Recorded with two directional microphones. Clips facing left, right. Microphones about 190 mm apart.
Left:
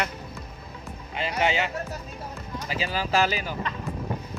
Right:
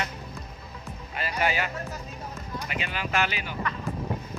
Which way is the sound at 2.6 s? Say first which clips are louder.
Left 5 dB; 35° left (ahead or behind).